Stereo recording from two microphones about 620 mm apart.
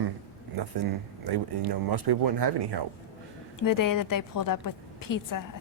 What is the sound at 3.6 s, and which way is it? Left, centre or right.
A woman's voice, left.